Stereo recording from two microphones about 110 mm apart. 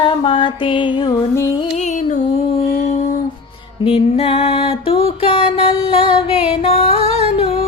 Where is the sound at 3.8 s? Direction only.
60° left (ahead or behind).